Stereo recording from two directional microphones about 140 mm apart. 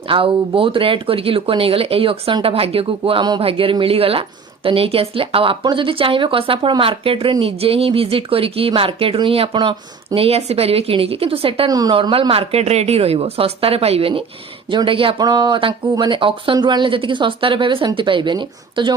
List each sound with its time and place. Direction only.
0.1 s speech: 40° right (ahead or behind)
11.7 s a woman's voice: 25° right (ahead or behind)